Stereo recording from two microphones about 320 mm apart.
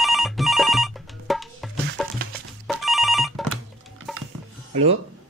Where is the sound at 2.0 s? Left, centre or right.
Centre.